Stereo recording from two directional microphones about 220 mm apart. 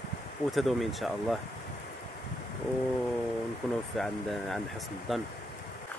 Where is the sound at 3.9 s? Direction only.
Centre (ahead or behind).